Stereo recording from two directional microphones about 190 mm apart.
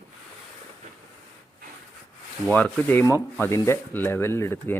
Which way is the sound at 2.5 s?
10° left (ahead or behind).